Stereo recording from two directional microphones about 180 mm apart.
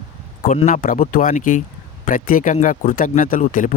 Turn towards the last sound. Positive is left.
turn(degrees=45)  # may be behind; listen again after turning